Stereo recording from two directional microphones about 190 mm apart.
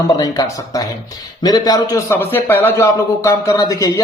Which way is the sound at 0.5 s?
20° left (ahead or behind).